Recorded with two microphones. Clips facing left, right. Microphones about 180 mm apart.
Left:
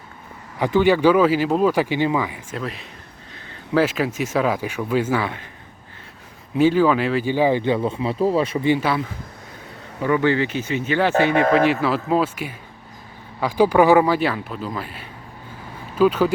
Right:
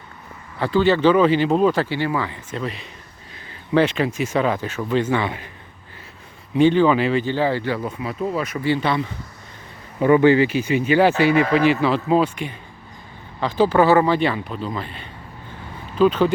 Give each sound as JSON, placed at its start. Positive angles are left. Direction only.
{"t": 0.6, "sound": "speech", "side_deg": 15}
{"t": 6.5, "sound": "speech", "side_deg": 5}
{"t": 7.3, "sound": "speech", "side_deg": 15}
{"t": 8.5, "sound": "speech", "side_deg": 15}
{"t": 10.0, "sound": "speech", "side_deg": -20}
{"t": 10.3, "sound": "speech", "side_deg": -10}
{"t": 11.5, "sound": "speech", "side_deg": 0}